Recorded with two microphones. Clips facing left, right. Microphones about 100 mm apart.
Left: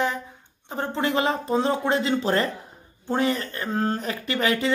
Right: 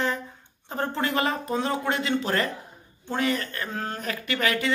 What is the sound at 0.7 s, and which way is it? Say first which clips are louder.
Speech: left 2 dB; 15° left (ahead or behind).